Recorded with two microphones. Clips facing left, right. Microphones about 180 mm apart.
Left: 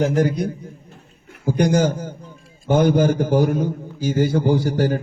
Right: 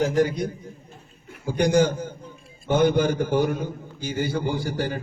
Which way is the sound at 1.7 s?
45° left (ahead or behind).